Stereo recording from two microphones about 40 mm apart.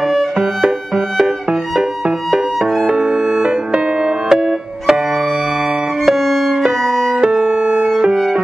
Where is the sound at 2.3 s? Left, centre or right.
Centre.